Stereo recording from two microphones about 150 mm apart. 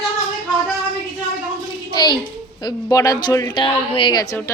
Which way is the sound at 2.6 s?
25° left (ahead or behind).